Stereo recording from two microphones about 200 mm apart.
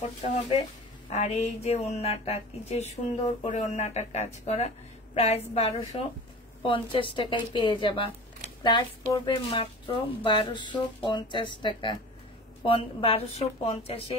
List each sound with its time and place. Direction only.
1.1 s speech: 35° left (ahead or behind)